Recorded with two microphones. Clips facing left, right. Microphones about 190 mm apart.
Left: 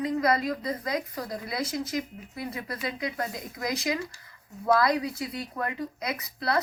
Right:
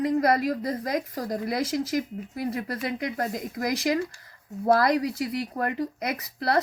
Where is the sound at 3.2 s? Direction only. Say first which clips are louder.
Right 4 dB; 45° right (ahead or behind).